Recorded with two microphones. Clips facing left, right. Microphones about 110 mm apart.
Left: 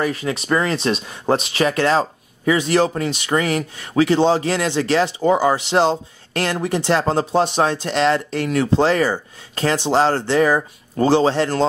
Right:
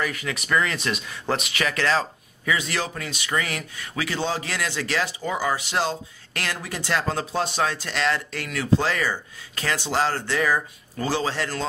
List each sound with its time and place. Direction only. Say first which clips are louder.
0.0 s speech: left 7 dB; 30° left (ahead or behind)